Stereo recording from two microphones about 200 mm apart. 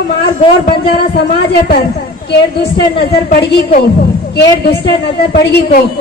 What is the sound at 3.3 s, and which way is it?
Speech, 40° left (ahead or behind).